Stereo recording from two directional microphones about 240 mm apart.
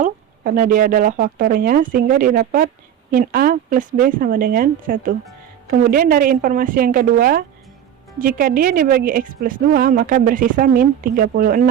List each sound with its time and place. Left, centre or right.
0.0 s a woman's voice: right